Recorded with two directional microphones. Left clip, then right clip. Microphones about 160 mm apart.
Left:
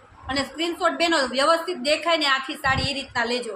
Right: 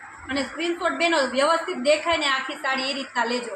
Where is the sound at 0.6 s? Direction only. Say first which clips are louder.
Left 1 dB; 90° left.